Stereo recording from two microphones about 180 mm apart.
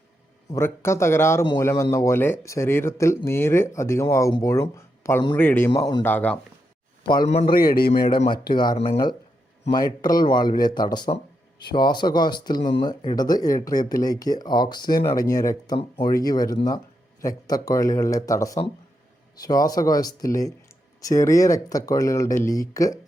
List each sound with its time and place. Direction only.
0.5 s speech: 15° left (ahead or behind)
5.7 s speech: 25° left (ahead or behind)
6.0 s speech: 10° left (ahead or behind)
7.4 s a man's voice: 55° left (ahead or behind)
8.1 s speech: 25° left (ahead or behind)